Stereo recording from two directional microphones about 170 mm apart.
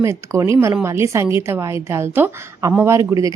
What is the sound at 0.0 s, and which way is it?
Speech, 15° right (ahead or behind).